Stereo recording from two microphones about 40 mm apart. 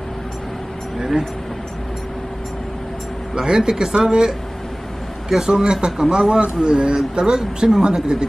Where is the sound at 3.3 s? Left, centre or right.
Centre.